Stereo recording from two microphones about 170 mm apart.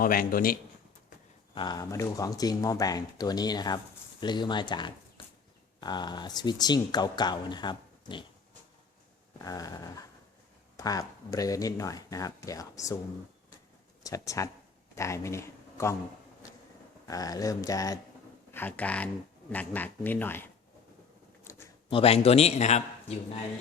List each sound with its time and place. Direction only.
0.0 s a man's voice: 60° left (ahead or behind)
1.5 s speech: 25° left (ahead or behind)
9.4 s speech: 20° left (ahead or behind)
14.0 s speech: 20° left (ahead or behind)
17.1 s speech: 20° left (ahead or behind)
18.5 s speech: 10° left (ahead or behind)
21.8 s a man's voice: 35° left (ahead or behind)